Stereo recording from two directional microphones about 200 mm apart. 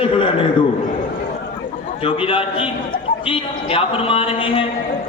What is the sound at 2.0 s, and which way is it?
A man's voice, 25° left (ahead or behind).